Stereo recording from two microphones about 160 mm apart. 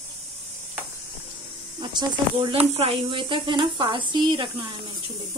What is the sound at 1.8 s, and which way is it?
A woman's voice, 30° right (ahead or behind).